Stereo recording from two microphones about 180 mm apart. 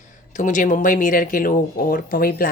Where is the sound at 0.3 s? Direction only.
45° left (ahead or behind).